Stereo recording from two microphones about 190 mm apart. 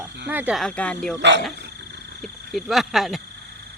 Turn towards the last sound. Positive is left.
turn(degrees=0)  # may be behind; listen again after turning